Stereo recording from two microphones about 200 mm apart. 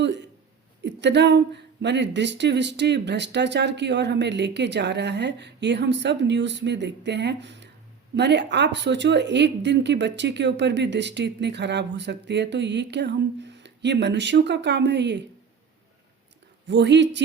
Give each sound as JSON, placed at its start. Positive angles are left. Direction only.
{"t": 0.0, "sound": "a sound", "side_deg": -60}
{"t": 0.9, "sound": "speech", "side_deg": -60}
{"t": 16.6, "sound": "speech", "side_deg": -60}